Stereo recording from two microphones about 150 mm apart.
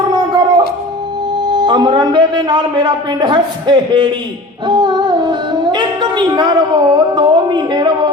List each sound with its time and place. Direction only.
1.5 s a man's voice: 30° right (ahead or behind)
4.6 s music: 30° right (ahead or behind)